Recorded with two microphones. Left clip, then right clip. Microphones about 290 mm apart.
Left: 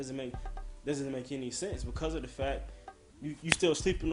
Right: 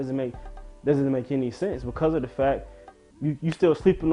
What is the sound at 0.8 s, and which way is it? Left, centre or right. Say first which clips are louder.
Speech: right 12 dB; right.